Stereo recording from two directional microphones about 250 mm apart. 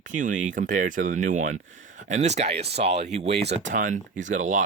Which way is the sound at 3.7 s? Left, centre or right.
Right.